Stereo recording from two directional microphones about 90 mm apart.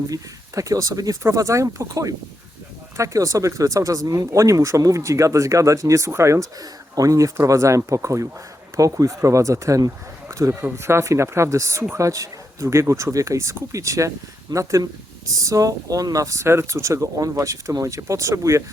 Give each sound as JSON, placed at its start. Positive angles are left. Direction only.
{"t": 0.1, "sound": "speech", "side_deg": -40}